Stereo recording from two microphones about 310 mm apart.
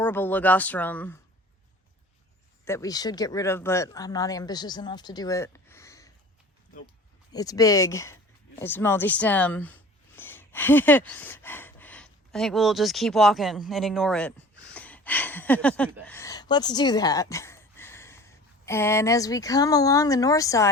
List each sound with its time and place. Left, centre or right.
0.0 s speech: centre
2.6 s speech: centre
7.3 s speech: centre